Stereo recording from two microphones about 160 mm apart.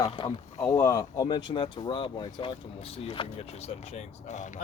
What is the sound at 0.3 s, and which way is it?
Speech, 15° left (ahead or behind).